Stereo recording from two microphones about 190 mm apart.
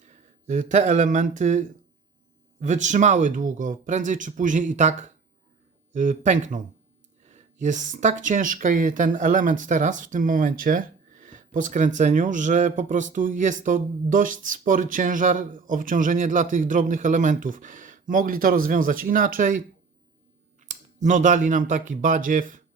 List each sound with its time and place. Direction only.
0.0 s speech: 40° right (ahead or behind)